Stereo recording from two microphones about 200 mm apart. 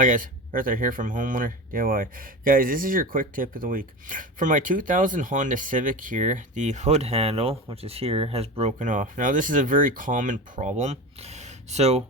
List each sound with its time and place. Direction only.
0.0 s speech: 40° right (ahead or behind)